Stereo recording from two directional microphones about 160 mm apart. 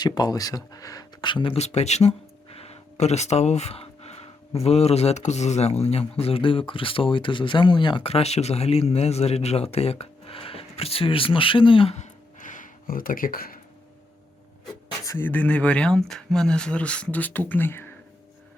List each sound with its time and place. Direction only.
0.0 s speech: 25° left (ahead or behind); by 13.6 s 65° left (ahead or behind)
15.0 s speech: 15° left (ahead or behind)